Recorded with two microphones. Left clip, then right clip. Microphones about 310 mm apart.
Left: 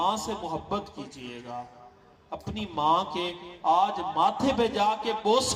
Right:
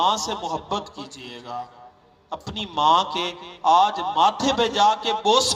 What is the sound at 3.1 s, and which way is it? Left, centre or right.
A man's voice, right.